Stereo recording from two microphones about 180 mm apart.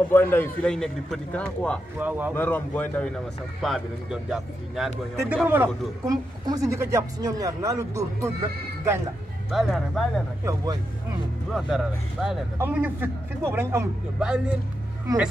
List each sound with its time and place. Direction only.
0.1 s a man's voice: 10° left (ahead or behind)
2.0 s speech: 10° right (ahead or behind)
2.3 s a man's voice: 10° left (ahead or behind)
5.1 s speech: 15° right (ahead or behind)
9.5 s speech: centre (ahead or behind)
10.4 s speech: 20° right (ahead or behind)
11.5 s speech: centre (ahead or behind)